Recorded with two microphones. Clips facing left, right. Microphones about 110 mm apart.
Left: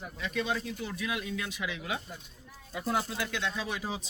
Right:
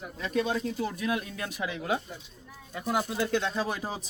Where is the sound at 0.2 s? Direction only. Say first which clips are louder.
Right 4 dB; 40° right (ahead or behind).